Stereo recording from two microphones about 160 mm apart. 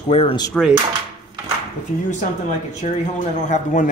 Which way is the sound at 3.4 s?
50° left (ahead or behind).